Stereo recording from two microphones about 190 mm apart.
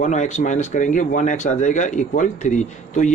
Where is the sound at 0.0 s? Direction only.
40° left (ahead or behind).